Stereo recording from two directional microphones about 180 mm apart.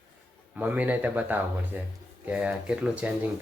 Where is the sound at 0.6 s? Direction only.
10° right (ahead or behind).